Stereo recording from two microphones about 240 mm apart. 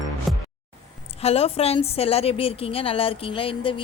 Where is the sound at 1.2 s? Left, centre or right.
Left.